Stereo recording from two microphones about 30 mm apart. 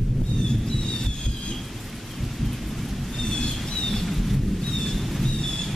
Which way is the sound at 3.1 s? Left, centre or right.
Centre.